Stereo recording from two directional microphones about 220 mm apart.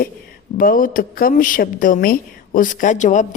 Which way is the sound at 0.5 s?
40° left (ahead or behind).